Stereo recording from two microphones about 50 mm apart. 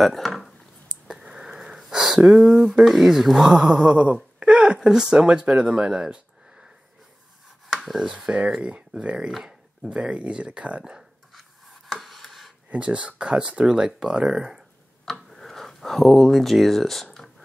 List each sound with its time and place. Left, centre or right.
0.0 s a sound: centre
1.0 s wheeze: centre
2.4 s speech: centre
7.6 s chopping: centre
8.1 s speech: centre
11.3 s a sound: centre
12.7 s speech: right
15.2 s speech: centre